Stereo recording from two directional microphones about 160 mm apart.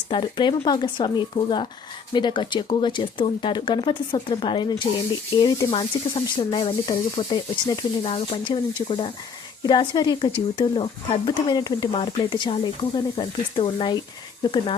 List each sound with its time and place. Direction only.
0.1 s speech: 30° left (ahead or behind)